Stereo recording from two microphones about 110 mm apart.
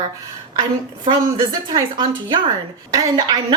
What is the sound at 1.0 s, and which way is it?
A woman's voice, 45° right (ahead or behind).